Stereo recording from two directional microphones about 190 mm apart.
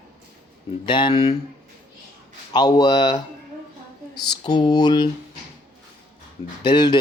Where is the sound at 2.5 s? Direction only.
20° left (ahead or behind).